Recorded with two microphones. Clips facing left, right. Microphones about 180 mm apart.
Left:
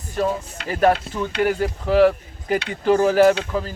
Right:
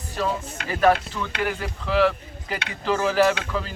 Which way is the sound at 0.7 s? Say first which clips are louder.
Left 2 dB; 30° left (ahead or behind).